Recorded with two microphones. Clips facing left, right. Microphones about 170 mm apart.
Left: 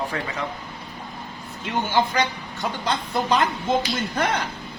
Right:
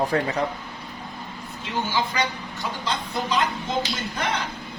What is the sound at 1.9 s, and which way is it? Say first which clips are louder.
Speech: left 5 dB; 55° left (ahead or behind).